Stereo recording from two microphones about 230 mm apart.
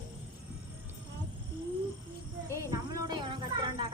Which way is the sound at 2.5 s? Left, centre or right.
Centre.